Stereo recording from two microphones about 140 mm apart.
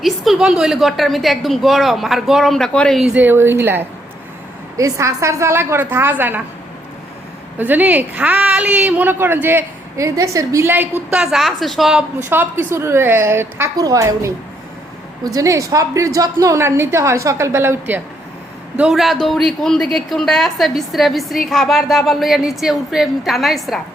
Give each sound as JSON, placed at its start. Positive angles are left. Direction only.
{"t": 0.0, "sound": "a woman's voice", "side_deg": -5}
{"t": 7.6, "sound": "a woman's voice", "side_deg": -10}
{"t": 11.1, "sound": "a woman's voice", "side_deg": -5}
{"t": 12.2, "sound": "a woman's voice", "side_deg": -15}
{"t": 18.8, "sound": "a woman's voice", "side_deg": -5}